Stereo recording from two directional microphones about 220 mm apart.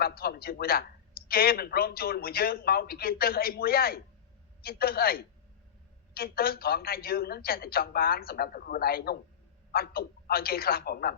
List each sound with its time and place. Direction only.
0.0 s a man's voice: 45° left (ahead or behind)